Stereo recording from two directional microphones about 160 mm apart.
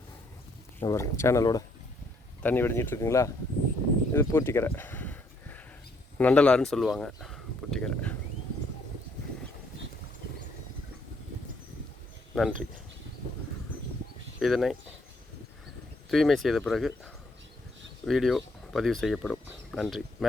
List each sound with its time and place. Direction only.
0.8 s speech: 15° left (ahead or behind)
4.1 s a sound: 15° left (ahead or behind)
6.1 s speech: 10° left (ahead or behind)
12.3 s speech: centre (ahead or behind)
14.3 s speech: centre (ahead or behind)
16.0 s speech: centre (ahead or behind)